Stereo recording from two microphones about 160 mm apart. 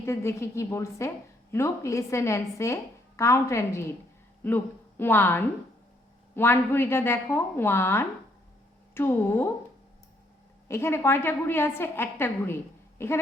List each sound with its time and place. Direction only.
0.0 s a woman's voice: 15° left (ahead or behind)
10.7 s a woman's voice: 15° left (ahead or behind)